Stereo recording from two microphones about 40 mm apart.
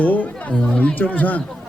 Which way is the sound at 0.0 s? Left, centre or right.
Left.